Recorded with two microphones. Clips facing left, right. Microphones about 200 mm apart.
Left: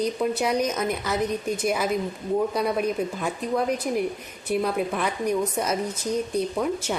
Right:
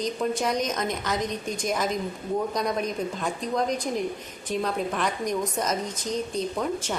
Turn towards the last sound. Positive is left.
turn(degrees=10)  # may be behind; listen again after turning